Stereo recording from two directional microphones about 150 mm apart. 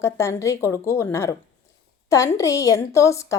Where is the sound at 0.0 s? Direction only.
20° left (ahead or behind).